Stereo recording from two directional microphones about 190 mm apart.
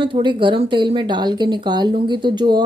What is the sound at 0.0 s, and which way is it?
Speech, 25° right (ahead or behind).